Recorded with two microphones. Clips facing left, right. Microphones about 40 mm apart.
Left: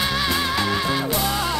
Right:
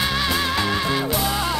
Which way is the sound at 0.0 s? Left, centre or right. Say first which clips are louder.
Even; centre.